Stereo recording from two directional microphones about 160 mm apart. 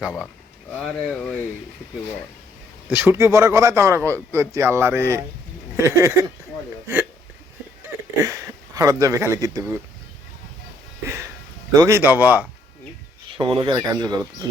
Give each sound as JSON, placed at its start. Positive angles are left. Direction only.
{"t": 0.0, "sound": "speech", "side_deg": -5}
{"t": 2.9, "sound": "a man's voice", "side_deg": -10}
{"t": 5.7, "sound": "a sound", "side_deg": -20}
{"t": 8.2, "sound": "speech", "side_deg": -20}
{"t": 11.8, "sound": "a man's voice", "side_deg": -15}
{"t": 13.3, "sound": "speech", "side_deg": -35}